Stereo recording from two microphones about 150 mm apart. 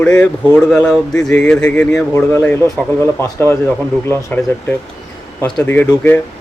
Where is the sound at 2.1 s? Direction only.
20° left (ahead or behind).